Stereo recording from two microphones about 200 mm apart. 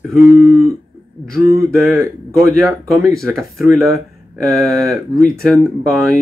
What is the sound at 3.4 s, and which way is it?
Speech, centre (ahead or behind).